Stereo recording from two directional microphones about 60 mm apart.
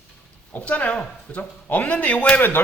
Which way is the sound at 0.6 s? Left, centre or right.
Left.